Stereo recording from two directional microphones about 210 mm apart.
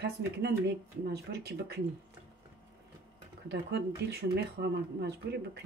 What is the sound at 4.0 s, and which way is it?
Speech, 50° right (ahead or behind).